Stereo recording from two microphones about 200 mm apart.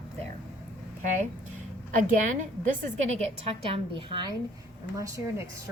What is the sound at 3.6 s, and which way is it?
A woman's voice, 25° right (ahead or behind).